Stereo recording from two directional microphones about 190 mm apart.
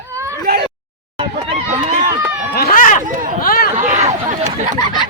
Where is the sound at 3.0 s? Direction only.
45° right (ahead or behind).